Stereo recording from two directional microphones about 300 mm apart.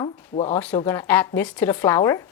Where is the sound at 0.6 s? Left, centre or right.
Centre.